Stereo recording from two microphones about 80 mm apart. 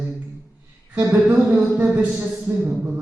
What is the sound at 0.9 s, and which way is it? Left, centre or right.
A man's voice, right.